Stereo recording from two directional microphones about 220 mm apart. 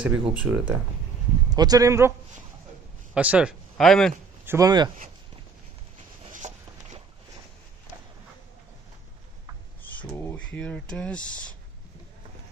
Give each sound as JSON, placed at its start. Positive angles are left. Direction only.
{"t": 0.0, "sound": "speech", "side_deg": -5}
{"t": 1.5, "sound": "speech", "side_deg": -15}
{"t": 3.2, "sound": "speech", "side_deg": -5}
{"t": 4.5, "sound": "speech", "side_deg": -15}
{"t": 6.3, "sound": "a sound", "side_deg": -35}
{"t": 10.0, "sound": "speech", "side_deg": 10}